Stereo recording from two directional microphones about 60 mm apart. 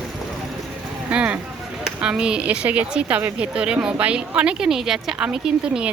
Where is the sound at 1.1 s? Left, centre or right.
Right.